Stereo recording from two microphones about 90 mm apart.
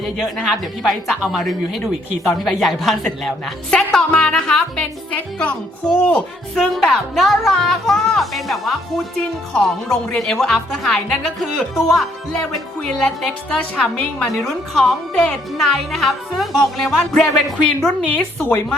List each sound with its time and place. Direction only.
0.4 s a woman's voice: centre (ahead or behind)
6.7 s a woman's voice: centre (ahead or behind); by 18.6 s 20° left (ahead or behind)